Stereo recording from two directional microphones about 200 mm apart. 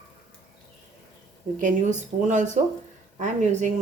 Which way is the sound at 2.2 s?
35° right (ahead or behind).